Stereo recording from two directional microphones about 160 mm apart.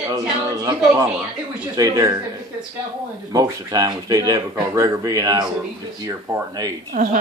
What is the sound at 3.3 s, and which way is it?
Speech, 20° right (ahead or behind).